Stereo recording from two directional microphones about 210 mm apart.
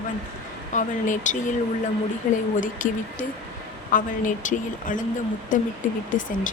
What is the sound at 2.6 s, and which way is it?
A woman's voice, 40° left (ahead or behind).